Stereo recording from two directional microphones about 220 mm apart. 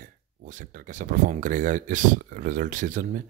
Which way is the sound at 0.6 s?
35° right (ahead or behind).